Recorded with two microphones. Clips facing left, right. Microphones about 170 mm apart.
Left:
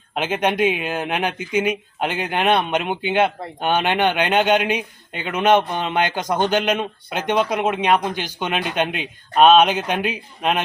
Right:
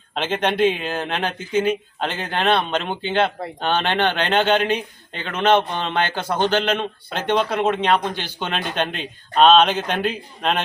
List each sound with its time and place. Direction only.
0.1 s speech: 10° left (ahead or behind)